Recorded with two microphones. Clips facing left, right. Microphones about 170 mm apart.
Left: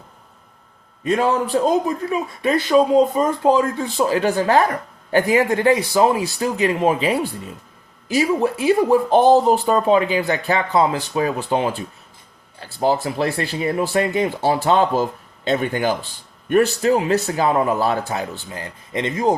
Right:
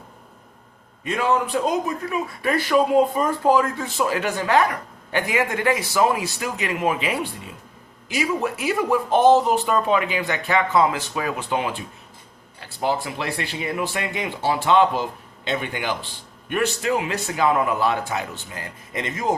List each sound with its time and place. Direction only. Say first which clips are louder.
1.0 s speech: left 3 dB; 35° left (ahead or behind)